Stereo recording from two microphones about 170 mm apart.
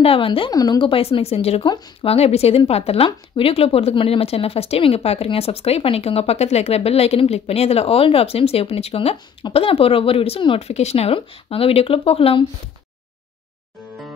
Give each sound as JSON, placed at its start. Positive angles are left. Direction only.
{"t": 0.0, "sound": "speech", "side_deg": 30}